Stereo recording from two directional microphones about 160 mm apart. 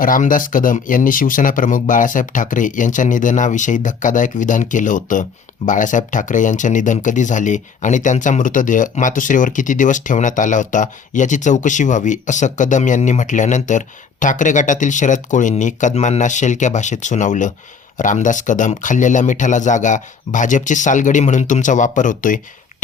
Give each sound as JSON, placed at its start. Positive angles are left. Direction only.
{"t": 0.0, "sound": "speech", "side_deg": 55}